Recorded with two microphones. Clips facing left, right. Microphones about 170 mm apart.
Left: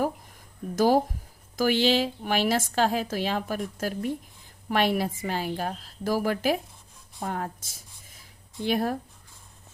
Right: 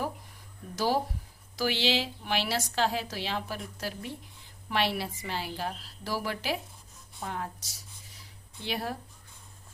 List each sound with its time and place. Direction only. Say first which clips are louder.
0.8 s a woman's voice: left 7 dB; 50° left (ahead or behind)